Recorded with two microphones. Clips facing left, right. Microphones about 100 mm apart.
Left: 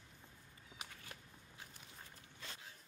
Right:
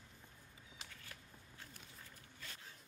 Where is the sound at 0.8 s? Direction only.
15° left (ahead or behind).